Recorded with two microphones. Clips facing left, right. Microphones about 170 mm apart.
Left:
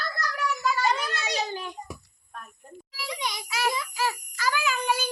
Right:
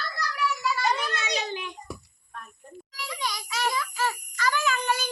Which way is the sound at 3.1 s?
20° left (ahead or behind).